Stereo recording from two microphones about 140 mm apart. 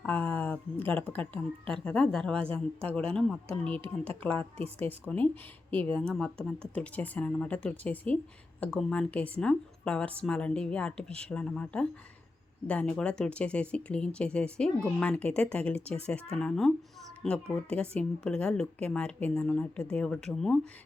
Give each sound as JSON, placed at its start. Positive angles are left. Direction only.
{"t": 0.0, "sound": "a woman's voice", "side_deg": 10}
{"t": 3.8, "sound": "speech", "side_deg": -45}
{"t": 4.2, "sound": "speech", "side_deg": 10}
{"t": 4.5, "sound": "speech", "side_deg": -45}
{"t": 4.9, "sound": "speech", "side_deg": 10}